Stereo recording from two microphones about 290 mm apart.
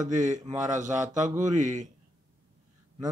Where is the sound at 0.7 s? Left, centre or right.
Right.